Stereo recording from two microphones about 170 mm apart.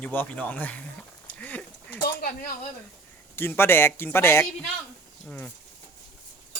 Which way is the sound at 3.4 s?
15° left (ahead or behind).